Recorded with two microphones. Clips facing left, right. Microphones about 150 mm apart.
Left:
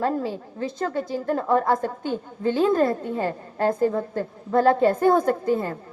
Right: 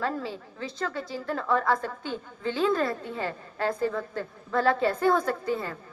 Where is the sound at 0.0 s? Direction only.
50° left (ahead or behind).